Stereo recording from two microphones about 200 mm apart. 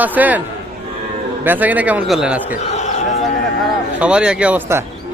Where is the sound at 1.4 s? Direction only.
10° right (ahead or behind).